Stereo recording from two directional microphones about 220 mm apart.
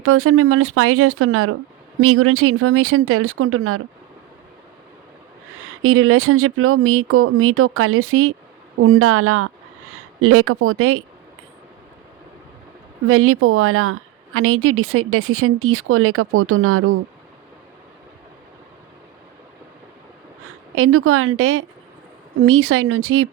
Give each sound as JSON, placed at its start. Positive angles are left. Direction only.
{"t": 0.0, "sound": "a woman's voice", "side_deg": -70}
{"t": 5.6, "sound": "a woman's voice", "side_deg": -70}
{"t": 13.1, "sound": "a woman's voice", "side_deg": -75}
{"t": 20.7, "sound": "a woman's voice", "side_deg": -70}